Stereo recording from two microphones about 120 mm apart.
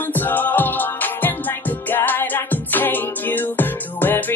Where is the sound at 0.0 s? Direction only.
15° left (ahead or behind).